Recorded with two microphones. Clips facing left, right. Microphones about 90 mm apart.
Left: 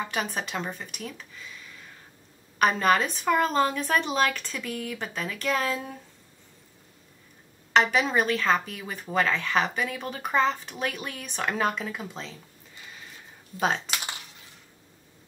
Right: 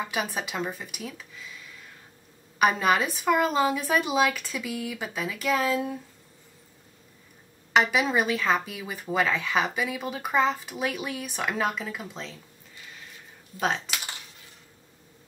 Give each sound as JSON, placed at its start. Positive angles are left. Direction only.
{"t": 0.0, "sound": "speech", "side_deg": -5}
{"t": 7.7, "sound": "speech", "side_deg": -5}
{"t": 13.9, "sound": "a sound", "side_deg": 0}